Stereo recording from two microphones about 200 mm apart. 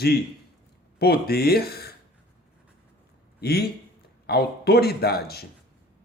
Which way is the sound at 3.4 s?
55° left (ahead or behind).